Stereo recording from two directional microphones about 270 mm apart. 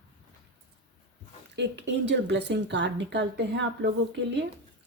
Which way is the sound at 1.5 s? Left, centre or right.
Right.